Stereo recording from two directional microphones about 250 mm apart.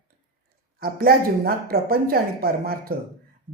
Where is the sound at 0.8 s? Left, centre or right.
Right.